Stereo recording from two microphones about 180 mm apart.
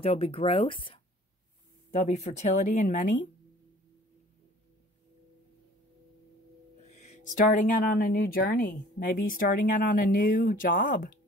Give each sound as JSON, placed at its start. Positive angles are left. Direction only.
{"t": 0.0, "sound": "speech", "side_deg": 30}
{"t": 1.9, "sound": "speech", "side_deg": 40}
{"t": 6.9, "sound": "speech", "side_deg": 40}